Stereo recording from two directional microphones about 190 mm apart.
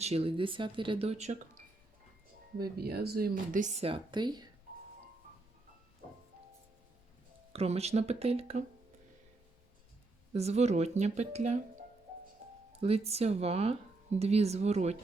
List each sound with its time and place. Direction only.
0.0 s speech: 30° right (ahead or behind)
2.6 s speech: 55° right (ahead or behind); by 4.4 s 25° right (ahead or behind)
7.5 s speech: 35° right (ahead or behind)
10.3 s speech: 35° right (ahead or behind)
12.8 s speech: 30° right (ahead or behind)